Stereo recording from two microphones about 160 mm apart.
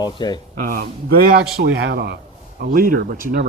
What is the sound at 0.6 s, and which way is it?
A man's voice, 65° right (ahead or behind).